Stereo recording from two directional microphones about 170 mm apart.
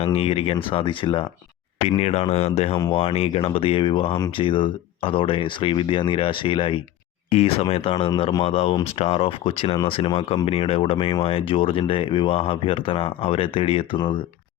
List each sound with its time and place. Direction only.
0.0 s speech: 35° left (ahead or behind)